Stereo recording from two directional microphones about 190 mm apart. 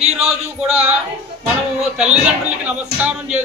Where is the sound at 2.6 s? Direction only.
5° right (ahead or behind).